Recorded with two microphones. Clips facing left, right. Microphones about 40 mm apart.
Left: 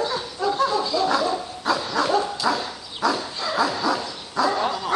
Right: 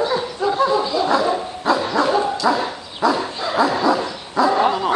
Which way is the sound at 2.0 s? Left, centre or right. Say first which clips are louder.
Right 2 dB; centre.